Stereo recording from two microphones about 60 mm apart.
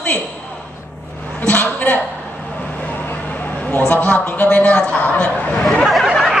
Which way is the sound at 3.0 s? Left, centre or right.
Left.